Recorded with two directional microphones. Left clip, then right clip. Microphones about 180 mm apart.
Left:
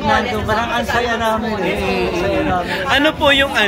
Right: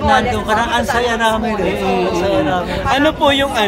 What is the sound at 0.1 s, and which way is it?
Speech, 20° right (ahead or behind).